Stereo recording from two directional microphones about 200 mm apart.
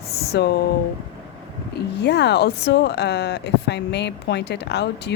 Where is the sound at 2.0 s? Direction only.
55° left (ahead or behind).